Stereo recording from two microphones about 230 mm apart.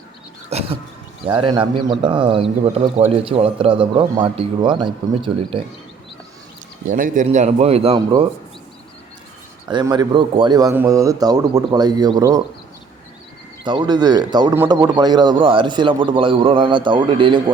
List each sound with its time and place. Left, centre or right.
0.5 s a sound: right
1.3 s a man's voice: right
6.9 s a man's voice: right
9.6 s a man's voice: centre
13.7 s a man's voice: centre